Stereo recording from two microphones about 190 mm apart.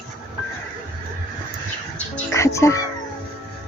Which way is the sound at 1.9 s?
15° left (ahead or behind).